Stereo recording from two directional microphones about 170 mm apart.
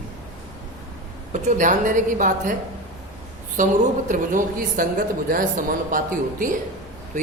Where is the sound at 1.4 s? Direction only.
45° right (ahead or behind).